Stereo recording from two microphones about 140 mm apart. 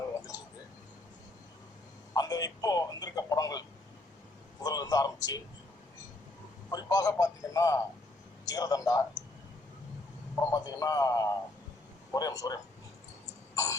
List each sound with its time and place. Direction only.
2.1 s speech: 25° left (ahead or behind)
6.7 s speech: 25° left (ahead or behind)
10.3 s speech: 20° left (ahead or behind)